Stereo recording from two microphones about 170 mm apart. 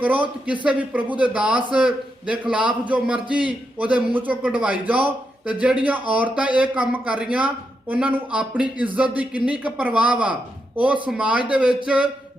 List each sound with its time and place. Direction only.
0.0 s a man's voice: 10° right (ahead or behind)